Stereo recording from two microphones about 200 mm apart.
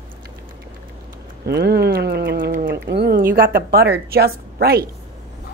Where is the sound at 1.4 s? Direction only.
55° right (ahead or behind).